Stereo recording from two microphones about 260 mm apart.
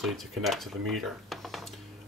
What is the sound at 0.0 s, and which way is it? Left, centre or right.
Speech, centre.